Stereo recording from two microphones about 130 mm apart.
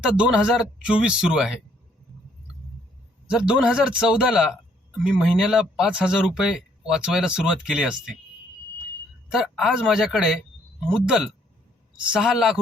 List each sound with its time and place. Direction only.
0.0 s speech: 5° right (ahead or behind)
3.3 s speech: 5° right (ahead or behind)
9.3 s speech: 5° right (ahead or behind)